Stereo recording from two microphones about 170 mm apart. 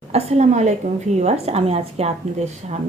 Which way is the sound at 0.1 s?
40° right (ahead or behind).